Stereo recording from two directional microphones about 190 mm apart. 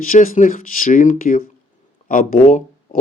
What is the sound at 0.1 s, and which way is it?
Speech, 45° left (ahead or behind).